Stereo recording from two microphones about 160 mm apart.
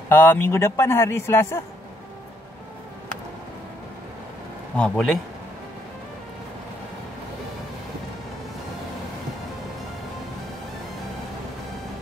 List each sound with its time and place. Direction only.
0.1 s a man's voice: 15° left (ahead or behind)
4.7 s speech: 5° left (ahead or behind)